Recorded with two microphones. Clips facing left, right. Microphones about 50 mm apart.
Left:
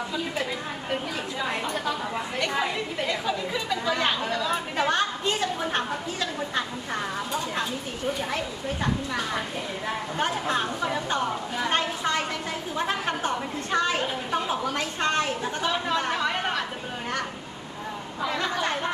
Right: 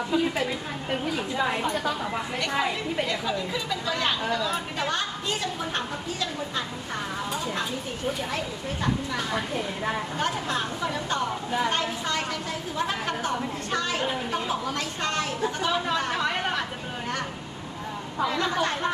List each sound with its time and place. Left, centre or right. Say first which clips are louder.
1.4 s a woman's voice: right 3 dB; centre
1.8 s chatter: right 1 dB; centre
2.5 s a woman's voice: right 2 dB; centre
3.1 s a woman's voice: left 1 dB; centre
4.9 s a woman's voice: left 5 dB; left
8.8 s a woman's voice: even; centre
10.2 s a woman's voice: left 2 dB; centre
13.7 s a sound: left 4 dB; left
14.0 s a sound: even; centre
14.7 s a sound: left 3 dB; left
15.6 s chatter: left 2 dB; centre
18.3 s a woman's voice: even; centre